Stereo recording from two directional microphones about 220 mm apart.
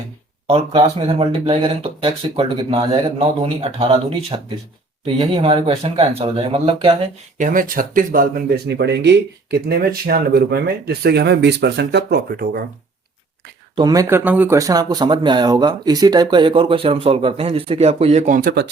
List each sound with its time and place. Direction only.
0.4 s speech: 25° right (ahead or behind)
7.3 s speech: 35° right (ahead or behind)
13.7 s speech: 15° right (ahead or behind); by 18.7 s 45° right (ahead or behind)